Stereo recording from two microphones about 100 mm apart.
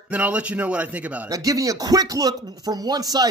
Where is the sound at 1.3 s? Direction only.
35° right (ahead or behind).